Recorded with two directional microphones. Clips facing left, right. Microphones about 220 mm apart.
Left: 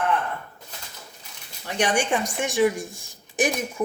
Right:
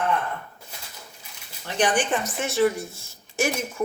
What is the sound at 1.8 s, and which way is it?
Speech, 10° left (ahead or behind).